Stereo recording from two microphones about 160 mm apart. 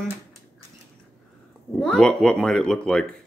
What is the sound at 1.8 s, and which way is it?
A woman's voice, 5° left (ahead or behind).